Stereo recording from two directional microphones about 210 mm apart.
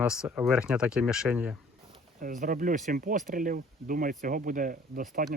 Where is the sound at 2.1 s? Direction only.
40° right (ahead or behind).